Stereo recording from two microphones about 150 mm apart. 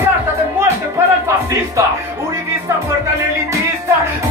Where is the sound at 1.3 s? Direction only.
20° right (ahead or behind).